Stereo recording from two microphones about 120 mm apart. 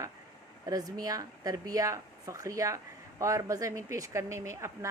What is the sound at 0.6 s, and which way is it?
Speech, 30° right (ahead or behind).